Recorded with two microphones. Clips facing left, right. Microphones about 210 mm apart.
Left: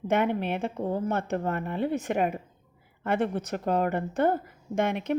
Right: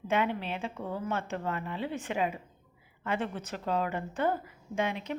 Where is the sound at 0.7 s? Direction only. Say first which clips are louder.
Left 6 dB; 35° left (ahead or behind).